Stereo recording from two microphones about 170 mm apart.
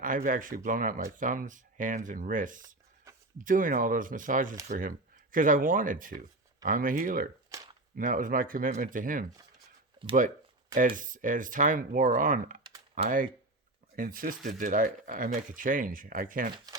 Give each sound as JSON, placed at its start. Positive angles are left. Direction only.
{"t": 0.0, "sound": "speech", "side_deg": -55}
{"t": 7.5, "sound": "a sound", "side_deg": -20}
{"t": 7.9, "sound": "speech", "side_deg": -55}
{"t": 10.8, "sound": "speech", "side_deg": -50}